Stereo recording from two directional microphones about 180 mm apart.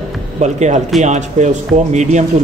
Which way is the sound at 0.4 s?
40° right (ahead or behind).